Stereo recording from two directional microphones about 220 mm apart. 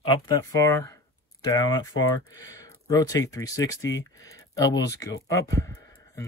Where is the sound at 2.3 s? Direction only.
15° left (ahead or behind).